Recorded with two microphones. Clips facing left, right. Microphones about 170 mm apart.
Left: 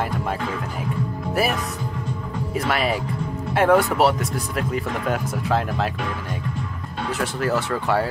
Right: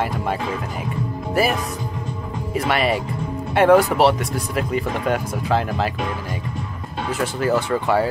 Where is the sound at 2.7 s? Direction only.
Centre (ahead or behind).